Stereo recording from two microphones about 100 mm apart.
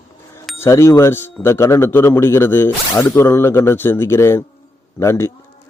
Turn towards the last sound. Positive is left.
turn(degrees=30)  # may be behind; listen again after turning